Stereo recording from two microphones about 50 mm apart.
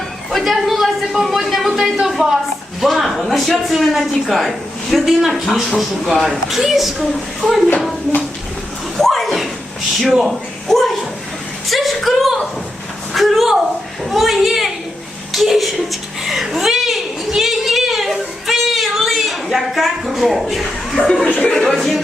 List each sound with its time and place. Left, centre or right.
0.3 s speech: centre
9.0 s a sound: centre
10.1 s a man's voice: centre
13.1 s a sound: centre
14.0 s speech: centre
15.3 s chuckle: centre
21.2 s speech: centre
21.6 s speech: centre